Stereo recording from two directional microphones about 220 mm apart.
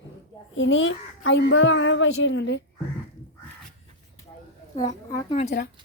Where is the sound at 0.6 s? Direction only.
60° left (ahead or behind).